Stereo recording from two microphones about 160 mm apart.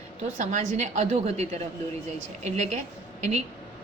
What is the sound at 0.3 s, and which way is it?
A woman's voice, 50° right (ahead or behind).